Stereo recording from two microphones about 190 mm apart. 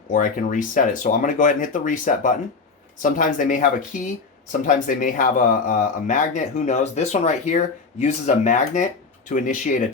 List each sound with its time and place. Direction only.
0.1 s speech: 45° left (ahead or behind)